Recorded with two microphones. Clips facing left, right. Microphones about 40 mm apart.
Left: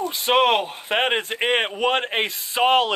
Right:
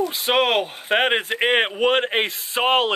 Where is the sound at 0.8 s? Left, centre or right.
Centre.